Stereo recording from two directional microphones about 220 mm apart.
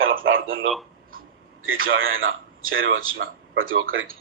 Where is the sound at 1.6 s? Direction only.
65° right (ahead or behind).